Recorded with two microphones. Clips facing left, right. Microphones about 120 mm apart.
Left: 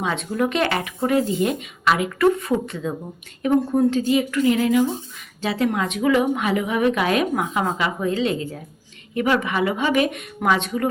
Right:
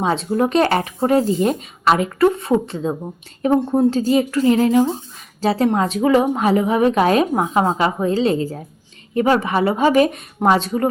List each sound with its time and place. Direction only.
0.0 s a woman's voice: 35° right (ahead or behind)